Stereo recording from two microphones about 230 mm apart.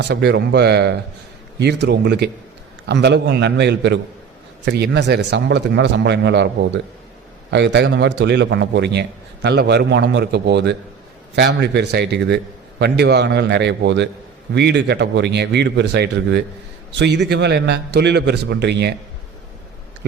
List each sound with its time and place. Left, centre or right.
0.0 s a man's voice: right